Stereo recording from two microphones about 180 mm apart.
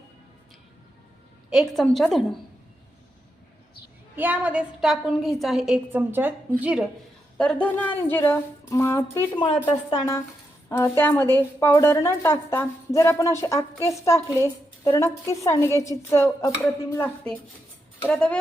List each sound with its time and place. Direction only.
1.5 s a woman's voice: centre (ahead or behind)
4.1 s a woman's voice: 10° right (ahead or behind)
7.3 s speech: 5° left (ahead or behind)
9.3 s a woman's voice: 30° left (ahead or behind)
18.1 s a woman's voice: 5° left (ahead or behind)